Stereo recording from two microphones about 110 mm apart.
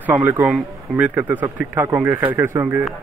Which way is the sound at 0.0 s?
15° right (ahead or behind).